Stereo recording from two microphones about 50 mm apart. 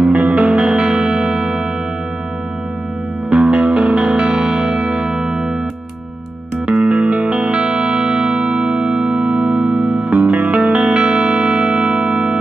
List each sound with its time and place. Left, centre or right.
0.1 s music: centre
3.3 s music: centre
6.7 s music: right